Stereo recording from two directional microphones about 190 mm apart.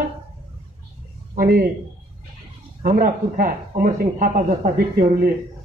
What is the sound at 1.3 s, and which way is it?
Speech, 50° right (ahead or behind).